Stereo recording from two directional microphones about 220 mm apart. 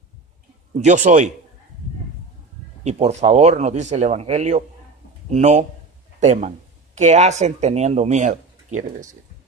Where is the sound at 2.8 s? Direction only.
30° right (ahead or behind).